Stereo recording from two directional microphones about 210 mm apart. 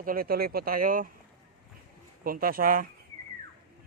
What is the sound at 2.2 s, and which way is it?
Speech, 45° right (ahead or behind).